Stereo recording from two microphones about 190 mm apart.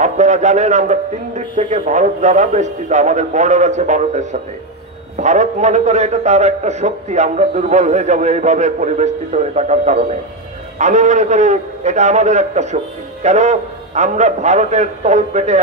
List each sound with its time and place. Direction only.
0.0 s a man's voice: 40° right (ahead or behind)